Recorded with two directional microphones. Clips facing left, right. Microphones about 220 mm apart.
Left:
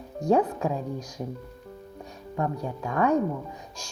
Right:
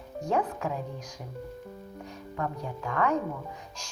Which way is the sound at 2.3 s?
30° left (ahead or behind).